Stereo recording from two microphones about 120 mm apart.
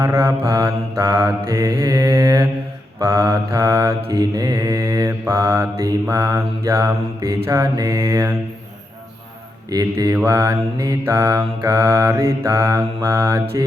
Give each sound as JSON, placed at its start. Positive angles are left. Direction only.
{"t": 0.0, "sound": "mantra", "side_deg": -25}
{"t": 9.6, "sound": "mantra", "side_deg": -30}